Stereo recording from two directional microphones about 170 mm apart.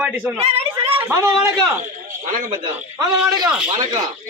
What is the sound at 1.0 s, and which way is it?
Speech, 15° right (ahead or behind).